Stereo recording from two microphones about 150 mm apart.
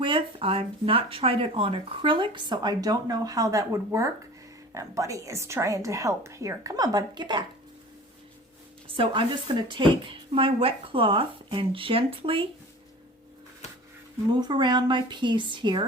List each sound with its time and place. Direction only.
0.0 s a woman's voice: 35° right (ahead or behind)
9.0 s speech: 35° right (ahead or behind)
14.3 s speech: 30° right (ahead or behind)